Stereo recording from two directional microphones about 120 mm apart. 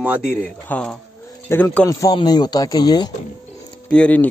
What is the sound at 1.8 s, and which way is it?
Speech, 35° left (ahead or behind).